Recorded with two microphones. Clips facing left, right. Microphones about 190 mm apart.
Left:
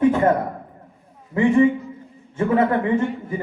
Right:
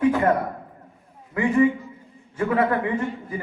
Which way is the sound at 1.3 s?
25° left (ahead or behind).